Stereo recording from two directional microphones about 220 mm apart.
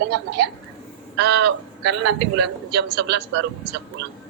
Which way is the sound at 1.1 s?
50° right (ahead or behind).